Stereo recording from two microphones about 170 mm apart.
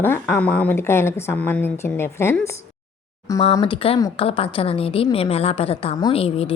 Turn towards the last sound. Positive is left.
turn(degrees=35)  # may be behind; listen again after turning